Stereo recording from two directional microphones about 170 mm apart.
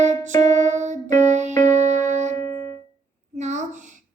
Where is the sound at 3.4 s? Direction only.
45° right (ahead or behind).